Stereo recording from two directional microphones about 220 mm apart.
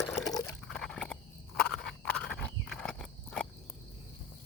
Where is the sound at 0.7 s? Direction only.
5° left (ahead or behind).